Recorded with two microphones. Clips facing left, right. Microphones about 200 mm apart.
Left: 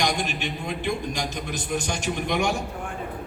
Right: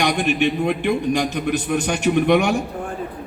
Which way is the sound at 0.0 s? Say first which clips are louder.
Right 8 dB; 60° right (ahead or behind).